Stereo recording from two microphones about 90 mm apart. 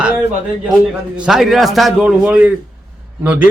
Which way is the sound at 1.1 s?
10° right (ahead or behind).